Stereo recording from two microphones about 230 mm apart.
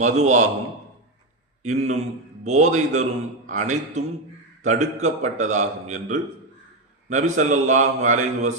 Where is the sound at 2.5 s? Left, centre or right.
Right.